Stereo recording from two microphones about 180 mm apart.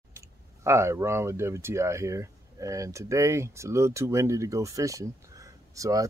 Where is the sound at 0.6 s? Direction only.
15° right (ahead or behind).